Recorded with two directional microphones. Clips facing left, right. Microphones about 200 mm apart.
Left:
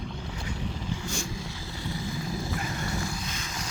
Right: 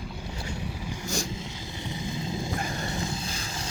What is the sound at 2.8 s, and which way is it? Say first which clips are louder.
Vehicle: right 1 dB; 20° right (ahead or behind).